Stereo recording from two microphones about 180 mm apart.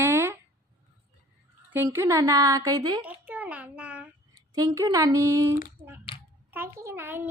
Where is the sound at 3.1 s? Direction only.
10° right (ahead or behind).